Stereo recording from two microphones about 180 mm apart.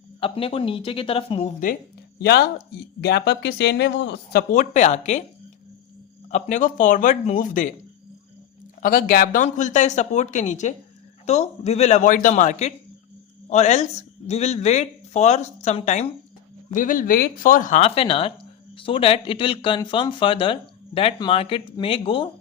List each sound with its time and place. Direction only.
0.2 s speech: 30° left (ahead or behind)
2.1 s speech: 60° left (ahead or behind)
4.5 s speech: 45° left (ahead or behind)
6.3 s speech: 45° left (ahead or behind)
8.8 s speech: 50° left (ahead or behind); by 22.3 s 30° left (ahead or behind)